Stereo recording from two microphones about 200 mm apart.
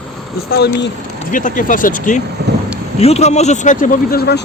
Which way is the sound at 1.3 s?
40° left (ahead or behind).